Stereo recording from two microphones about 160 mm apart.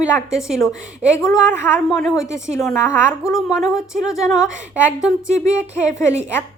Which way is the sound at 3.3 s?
5° right (ahead or behind).